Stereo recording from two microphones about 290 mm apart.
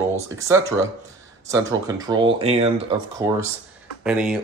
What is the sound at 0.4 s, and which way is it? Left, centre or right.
Speech, centre.